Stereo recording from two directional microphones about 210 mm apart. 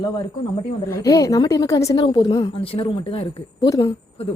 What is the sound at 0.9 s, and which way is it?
A woman's voice, 15° left (ahead or behind).